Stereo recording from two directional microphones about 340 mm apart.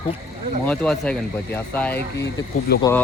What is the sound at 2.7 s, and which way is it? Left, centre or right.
Speech, left.